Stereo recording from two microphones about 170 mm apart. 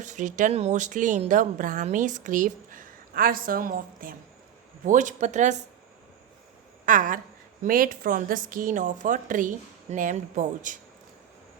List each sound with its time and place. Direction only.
0.0 s a woman's voice: 45° right (ahead or behind)
6.8 s a woman's voice: 50° right (ahead or behind)